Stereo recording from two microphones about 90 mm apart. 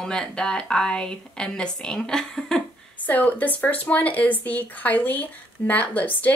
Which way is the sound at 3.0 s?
20° left (ahead or behind).